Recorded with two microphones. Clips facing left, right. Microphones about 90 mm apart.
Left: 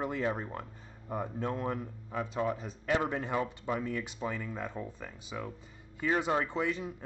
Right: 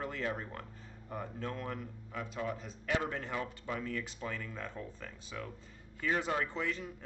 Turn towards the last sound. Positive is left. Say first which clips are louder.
# left 4 dB
turn(degrees=20)  # may be behind; listen again after turning